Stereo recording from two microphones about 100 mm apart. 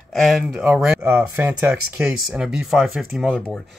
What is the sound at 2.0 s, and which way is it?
Speech, 10° right (ahead or behind).